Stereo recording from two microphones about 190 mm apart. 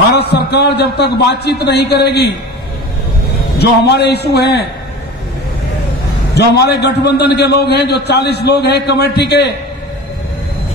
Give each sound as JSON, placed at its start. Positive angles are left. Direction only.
{"t": 0.1, "sound": "a man's voice", "side_deg": 60}
{"t": 3.5, "sound": "a man's voice", "side_deg": 60}
{"t": 6.3, "sound": "a man's voice", "side_deg": 60}